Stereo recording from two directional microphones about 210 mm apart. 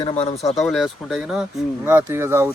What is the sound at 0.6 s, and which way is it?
Speech, centre (ahead or behind).